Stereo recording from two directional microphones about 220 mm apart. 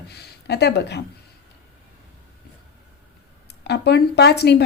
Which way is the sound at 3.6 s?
50° left (ahead or behind).